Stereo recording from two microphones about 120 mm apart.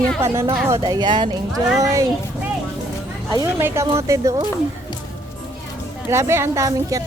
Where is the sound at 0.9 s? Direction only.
40° right (ahead or behind).